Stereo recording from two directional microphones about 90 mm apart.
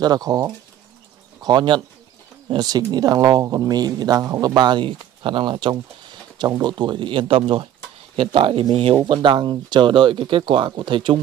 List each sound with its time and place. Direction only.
0.0 s a man's voice: 45° right (ahead or behind)
4.6 s speech: 60° right (ahead or behind)
8.2 s speech: 85° right; by 11.1 s 65° right (ahead or behind)